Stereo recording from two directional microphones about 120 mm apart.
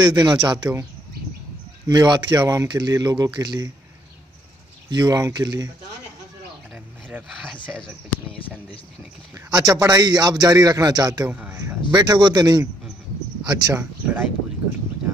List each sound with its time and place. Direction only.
0.0 s a man's voice: 35° right (ahead or behind)
1.9 s a man's voice: 35° right (ahead or behind)
4.8 s a man's voice: 35° right (ahead or behind)
9.3 s a man's voice: 30° right (ahead or behind)
11.2 s speech: 10° right (ahead or behind)
11.9 s a man's voice: 35° right (ahead or behind)
13.7 s speech: 15° right (ahead or behind)